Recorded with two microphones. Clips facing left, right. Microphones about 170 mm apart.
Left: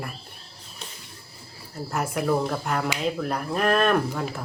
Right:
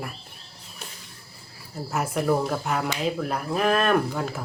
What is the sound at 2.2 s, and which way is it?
Speech, 5° right (ahead or behind).